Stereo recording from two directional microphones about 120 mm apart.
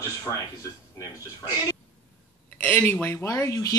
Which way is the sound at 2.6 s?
15° left (ahead or behind).